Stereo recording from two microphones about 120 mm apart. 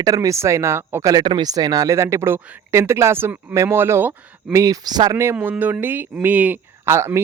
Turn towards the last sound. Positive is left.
turn(degrees=-25)  # may be behind; listen again after turning